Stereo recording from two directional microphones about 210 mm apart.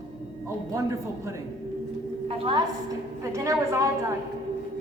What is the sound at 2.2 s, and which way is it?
Speech, 25° right (ahead or behind).